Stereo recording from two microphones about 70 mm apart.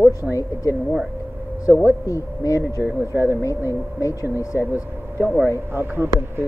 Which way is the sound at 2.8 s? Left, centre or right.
Right.